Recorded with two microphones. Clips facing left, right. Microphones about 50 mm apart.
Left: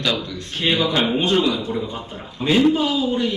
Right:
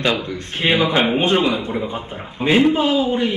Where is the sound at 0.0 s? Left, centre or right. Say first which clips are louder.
Right 3 dB; right.